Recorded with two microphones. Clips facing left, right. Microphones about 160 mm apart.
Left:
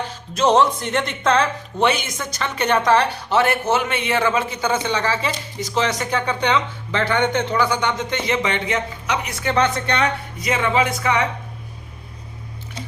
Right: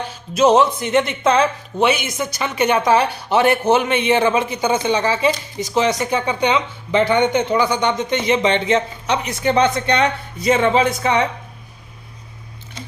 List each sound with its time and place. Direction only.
0.3 s speech: 5° right (ahead or behind); by 11.3 s 25° right (ahead or behind)